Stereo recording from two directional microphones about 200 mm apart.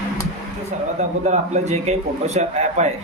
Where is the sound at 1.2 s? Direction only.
35° right (ahead or behind).